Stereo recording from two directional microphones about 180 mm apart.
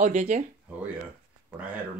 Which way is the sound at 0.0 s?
40° right (ahead or behind).